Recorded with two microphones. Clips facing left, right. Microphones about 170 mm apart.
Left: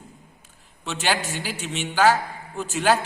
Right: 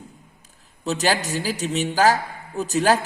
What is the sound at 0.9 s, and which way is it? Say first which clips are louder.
A woman's voice: right 4 dB; 40° right (ahead or behind).